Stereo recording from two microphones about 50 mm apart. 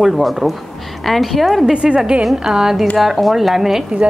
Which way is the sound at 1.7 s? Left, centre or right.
Centre.